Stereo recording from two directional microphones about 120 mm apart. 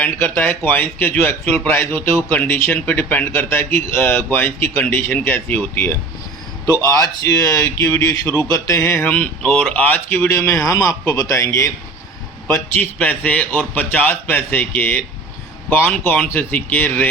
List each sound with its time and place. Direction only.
0.0 s a man's voice: 15° left (ahead or behind)
6.7 s speech: 30° left (ahead or behind)
9.4 s a man's voice: 5° left (ahead or behind); by 11.4 s 25° left (ahead or behind)
12.5 s a man's voice: 20° left (ahead or behind)